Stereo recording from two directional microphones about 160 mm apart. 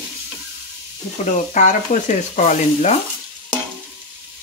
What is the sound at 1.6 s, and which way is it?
Stir, 50° left (ahead or behind).